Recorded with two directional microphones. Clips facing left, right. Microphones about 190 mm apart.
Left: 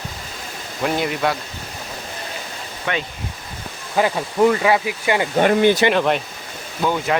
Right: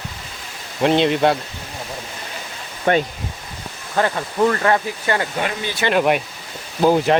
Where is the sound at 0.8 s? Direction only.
25° right (ahead or behind).